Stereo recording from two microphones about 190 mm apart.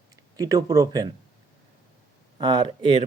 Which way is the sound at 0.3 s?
20° right (ahead or behind).